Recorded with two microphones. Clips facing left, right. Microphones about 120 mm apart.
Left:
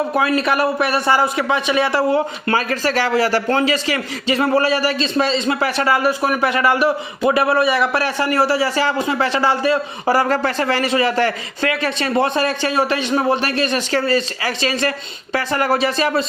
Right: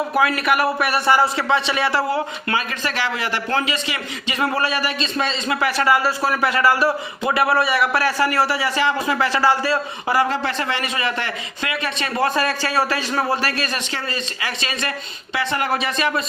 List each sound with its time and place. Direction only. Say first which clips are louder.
0.3 s a man's voice: left 2 dB; 25° left (ahead or behind)
2.6 s a man's voice: left 6 dB; 40° left (ahead or behind); by 9.7 s 25° left (ahead or behind)
10.1 s speech: left 3 dB; 45° left (ahead or behind)